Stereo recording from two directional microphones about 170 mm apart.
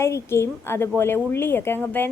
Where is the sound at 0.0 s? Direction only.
15° left (ahead or behind).